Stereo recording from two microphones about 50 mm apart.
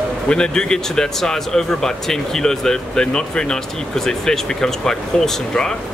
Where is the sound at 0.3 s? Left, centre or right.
Centre.